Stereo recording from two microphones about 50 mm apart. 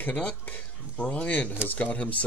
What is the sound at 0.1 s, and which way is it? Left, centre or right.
Speech, left.